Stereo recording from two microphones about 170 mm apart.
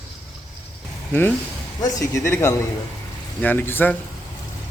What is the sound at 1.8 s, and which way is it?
Speech, 20° left (ahead or behind).